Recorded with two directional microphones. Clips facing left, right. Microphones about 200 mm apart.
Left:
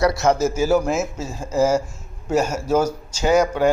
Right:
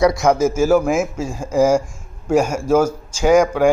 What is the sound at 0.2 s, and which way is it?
Speech, 10° right (ahead or behind).